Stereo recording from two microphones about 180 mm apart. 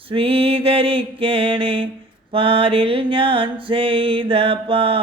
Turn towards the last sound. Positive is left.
turn(degrees=-30)  # may be behind; listen again after turning